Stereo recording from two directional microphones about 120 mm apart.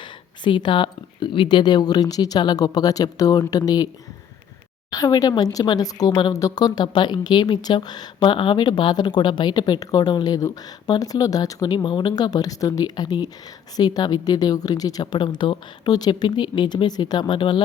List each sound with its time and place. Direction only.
0.0 s speech: 40° left (ahead or behind)
4.9 s speech: 30° left (ahead or behind)